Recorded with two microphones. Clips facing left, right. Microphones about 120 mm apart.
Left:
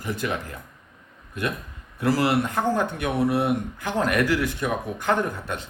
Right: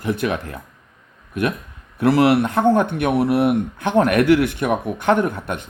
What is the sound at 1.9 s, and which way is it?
A man's voice, 65° right (ahead or behind).